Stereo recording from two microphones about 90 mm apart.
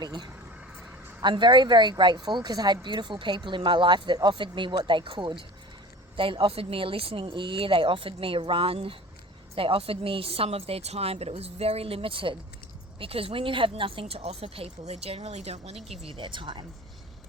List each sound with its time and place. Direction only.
0.0 s a woman's voice: 55° right (ahead or behind); by 12.4 s 75° right (ahead or behind)
13.0 s speech: 90° right
16.0 s speech: 65° right (ahead or behind)